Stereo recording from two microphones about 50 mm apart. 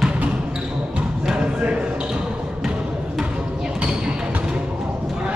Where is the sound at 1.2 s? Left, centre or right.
Centre.